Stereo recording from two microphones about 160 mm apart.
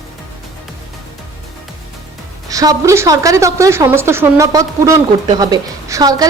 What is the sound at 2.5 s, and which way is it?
A woman's voice, 20° right (ahead or behind).